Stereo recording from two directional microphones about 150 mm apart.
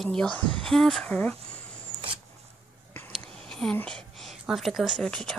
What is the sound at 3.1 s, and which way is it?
Speech, 5° left (ahead or behind).